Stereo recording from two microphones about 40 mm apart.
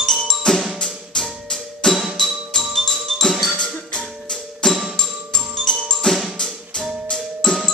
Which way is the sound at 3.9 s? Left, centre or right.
Left.